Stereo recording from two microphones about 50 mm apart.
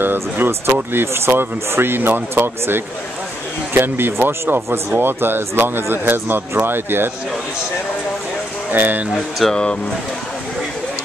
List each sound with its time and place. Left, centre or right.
0.0 s speech: right
4.9 s speech: right
8.7 s speech: right
9.1 s speech: centre